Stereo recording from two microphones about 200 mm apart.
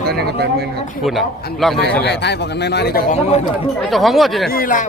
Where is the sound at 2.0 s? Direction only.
60° left (ahead or behind).